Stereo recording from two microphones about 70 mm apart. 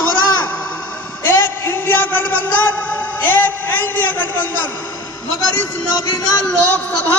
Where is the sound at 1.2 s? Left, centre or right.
Left.